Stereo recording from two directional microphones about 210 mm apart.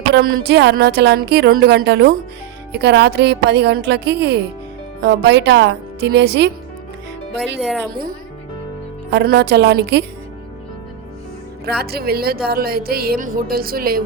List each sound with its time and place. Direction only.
0.1 s speech: 50° right (ahead or behind)
7.6 s a woman's voice: centre (ahead or behind)
9.0 s speech: 50° right (ahead or behind)
11.6 s speech: 50° right (ahead or behind)